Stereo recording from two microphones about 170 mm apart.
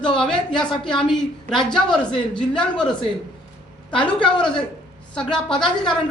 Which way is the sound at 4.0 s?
30° left (ahead or behind).